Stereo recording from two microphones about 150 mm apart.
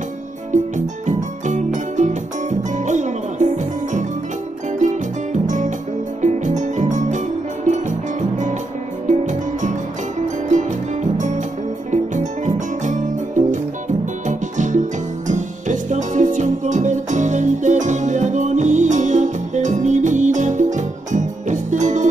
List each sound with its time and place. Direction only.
0.5 s music: 55° right (ahead or behind)
9.0 s music: 55° right (ahead or behind)
11.1 s music: 55° right (ahead or behind)